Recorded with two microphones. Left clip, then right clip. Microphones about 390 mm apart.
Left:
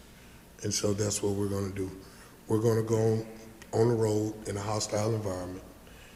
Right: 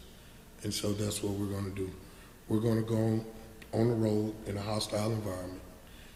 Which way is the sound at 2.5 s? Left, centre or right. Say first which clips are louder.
Left 5 dB; left.